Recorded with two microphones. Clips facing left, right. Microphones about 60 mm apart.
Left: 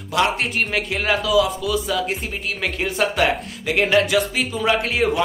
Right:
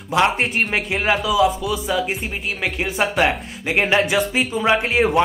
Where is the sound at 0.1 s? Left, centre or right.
Right.